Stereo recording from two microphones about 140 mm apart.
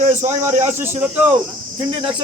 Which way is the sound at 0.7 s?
15° right (ahead or behind).